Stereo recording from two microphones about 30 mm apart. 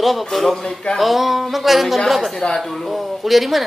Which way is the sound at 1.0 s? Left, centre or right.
Centre.